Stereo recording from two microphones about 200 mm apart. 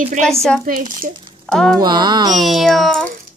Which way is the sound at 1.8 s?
20° right (ahead or behind).